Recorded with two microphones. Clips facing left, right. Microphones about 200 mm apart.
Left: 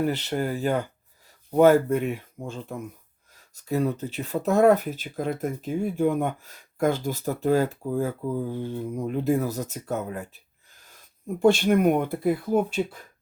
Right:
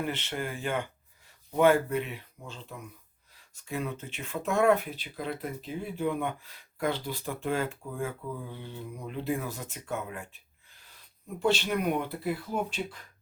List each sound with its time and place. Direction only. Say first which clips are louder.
0.0 s speech: left 8 dB; 40° left (ahead or behind)
3.3 s speech: left 9 dB; 40° left (ahead or behind)